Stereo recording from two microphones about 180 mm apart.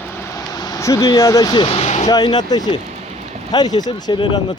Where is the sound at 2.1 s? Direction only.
20° left (ahead or behind).